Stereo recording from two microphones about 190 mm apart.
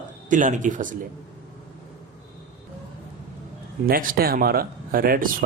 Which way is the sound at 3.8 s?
50° right (ahead or behind).